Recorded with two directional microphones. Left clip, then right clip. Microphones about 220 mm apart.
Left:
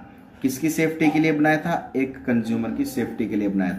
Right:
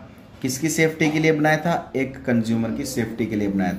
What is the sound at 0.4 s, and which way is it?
Speech, 35° right (ahead or behind).